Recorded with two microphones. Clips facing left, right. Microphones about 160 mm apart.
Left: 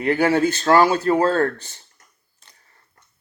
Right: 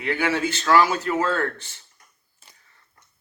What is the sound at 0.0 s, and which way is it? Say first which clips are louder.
Speech: left 6 dB; 40° left (ahead or behind).